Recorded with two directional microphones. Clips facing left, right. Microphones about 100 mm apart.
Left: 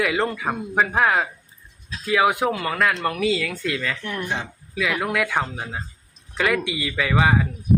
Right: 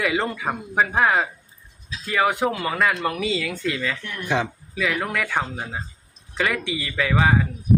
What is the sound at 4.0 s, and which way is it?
Speech, 35° left (ahead or behind).